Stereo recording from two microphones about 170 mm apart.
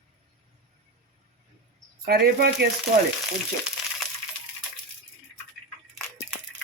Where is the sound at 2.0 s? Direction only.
65° right (ahead or behind).